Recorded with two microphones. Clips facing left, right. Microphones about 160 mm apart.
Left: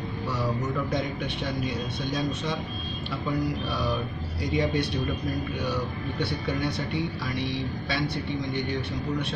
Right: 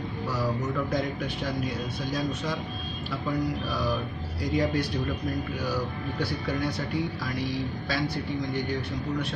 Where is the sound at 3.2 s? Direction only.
Centre (ahead or behind).